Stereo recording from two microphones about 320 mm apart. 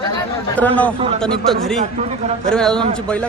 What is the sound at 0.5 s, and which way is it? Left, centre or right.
Speech, centre.